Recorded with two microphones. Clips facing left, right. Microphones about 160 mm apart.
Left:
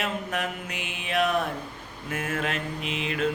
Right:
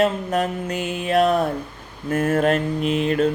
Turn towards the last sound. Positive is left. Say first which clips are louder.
# right 9 dB
turn(degrees=-40)  # may be behind; listen again after turning